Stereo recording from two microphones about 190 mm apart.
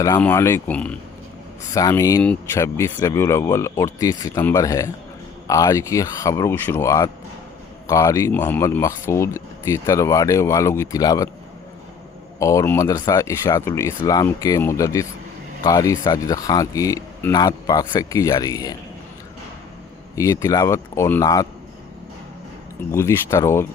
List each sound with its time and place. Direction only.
0.2 s speech: 10° left (ahead or behind)
12.4 s speech: 15° left (ahead or behind)
20.1 s speech: 15° left (ahead or behind)
22.9 s speech: 15° left (ahead or behind)